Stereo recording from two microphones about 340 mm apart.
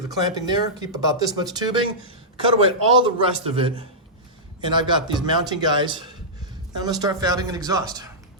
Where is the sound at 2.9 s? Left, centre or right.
Centre.